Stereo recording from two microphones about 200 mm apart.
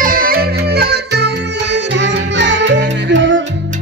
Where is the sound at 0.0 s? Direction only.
45° right (ahead or behind).